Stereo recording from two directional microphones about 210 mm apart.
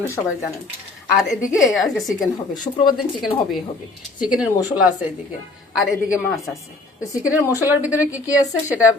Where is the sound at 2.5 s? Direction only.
20° left (ahead or behind).